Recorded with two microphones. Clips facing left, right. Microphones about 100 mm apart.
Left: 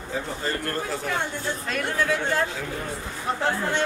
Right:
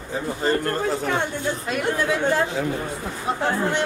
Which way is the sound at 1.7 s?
20° right (ahead or behind).